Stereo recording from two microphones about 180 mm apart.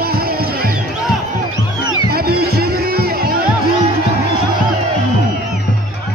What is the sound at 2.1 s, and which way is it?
Music, 60° right (ahead or behind).